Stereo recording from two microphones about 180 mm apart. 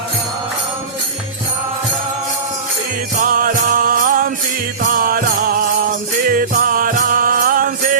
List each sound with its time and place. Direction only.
3.3 s music: 50° right (ahead or behind)